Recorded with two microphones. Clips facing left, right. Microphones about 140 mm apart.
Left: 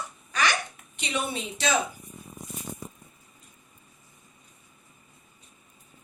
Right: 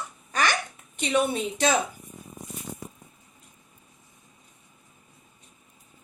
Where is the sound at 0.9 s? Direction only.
50° right (ahead or behind).